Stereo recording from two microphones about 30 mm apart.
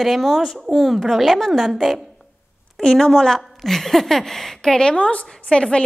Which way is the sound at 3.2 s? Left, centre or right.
Centre.